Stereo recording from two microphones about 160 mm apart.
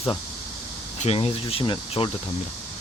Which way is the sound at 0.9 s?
40° left (ahead or behind).